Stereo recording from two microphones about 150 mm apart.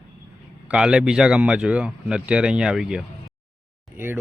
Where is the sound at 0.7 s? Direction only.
5° right (ahead or behind).